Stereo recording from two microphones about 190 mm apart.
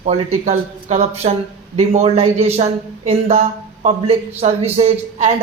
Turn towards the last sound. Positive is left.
turn(degrees=-35)  # may be behind; listen again after turning